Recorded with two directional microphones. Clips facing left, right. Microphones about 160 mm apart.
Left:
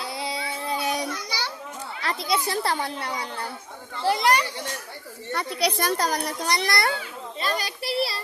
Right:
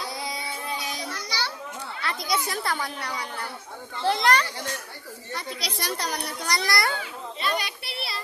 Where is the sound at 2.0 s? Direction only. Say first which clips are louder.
Left 3 dB; 30° left (ahead or behind).